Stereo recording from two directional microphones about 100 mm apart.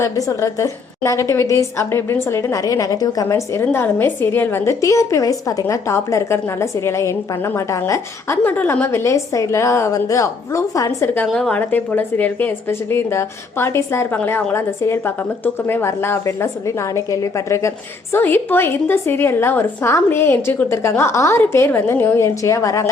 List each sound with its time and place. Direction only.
0.0 s a woman's voice: 30° left (ahead or behind)
11.3 s speech: 5° left (ahead or behind)
11.6 s a woman's voice: 20° left (ahead or behind)